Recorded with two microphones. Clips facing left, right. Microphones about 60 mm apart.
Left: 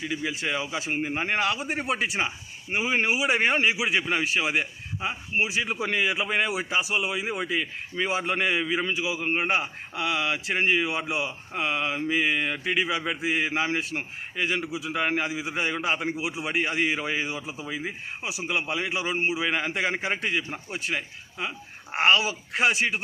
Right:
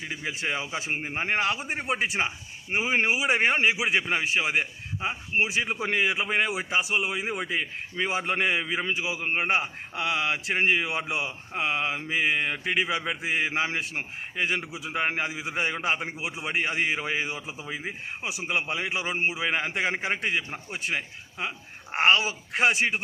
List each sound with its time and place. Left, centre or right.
0.1 s a man's voice: right
1.4 s a man's voice: right
1.6 s a man's voice: centre
1.9 s a man's voice: right